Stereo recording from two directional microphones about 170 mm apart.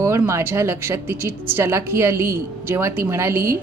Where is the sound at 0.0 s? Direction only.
15° right (ahead or behind).